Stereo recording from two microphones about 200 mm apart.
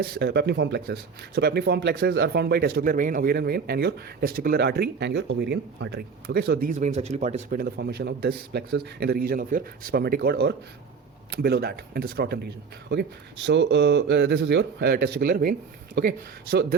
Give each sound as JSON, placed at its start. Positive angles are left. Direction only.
{"t": 0.0, "sound": "speech", "side_deg": -50}